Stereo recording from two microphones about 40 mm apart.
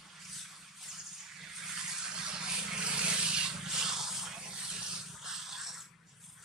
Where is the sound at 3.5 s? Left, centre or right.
Centre.